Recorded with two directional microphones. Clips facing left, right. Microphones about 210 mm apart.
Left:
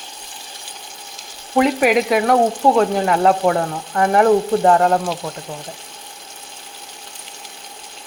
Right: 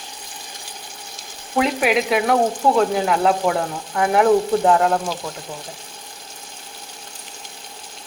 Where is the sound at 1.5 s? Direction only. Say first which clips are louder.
Left 4 dB; centre (ahead or behind).